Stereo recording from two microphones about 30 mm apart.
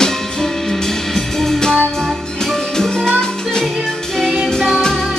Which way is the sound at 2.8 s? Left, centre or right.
Centre.